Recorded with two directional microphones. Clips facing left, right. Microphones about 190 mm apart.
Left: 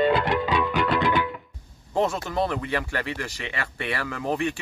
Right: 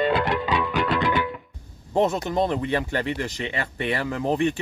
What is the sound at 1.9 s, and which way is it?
Speech, 20° right (ahead or behind).